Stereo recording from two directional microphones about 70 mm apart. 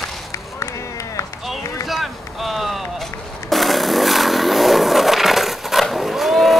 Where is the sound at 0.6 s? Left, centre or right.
Left.